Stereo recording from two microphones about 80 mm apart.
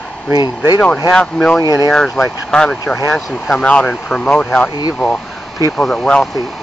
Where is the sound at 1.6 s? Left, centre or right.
Left.